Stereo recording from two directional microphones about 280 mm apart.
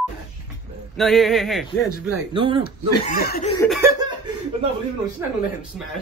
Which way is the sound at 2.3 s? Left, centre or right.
Centre.